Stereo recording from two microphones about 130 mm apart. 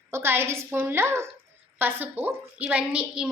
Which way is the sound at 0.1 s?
20° right (ahead or behind).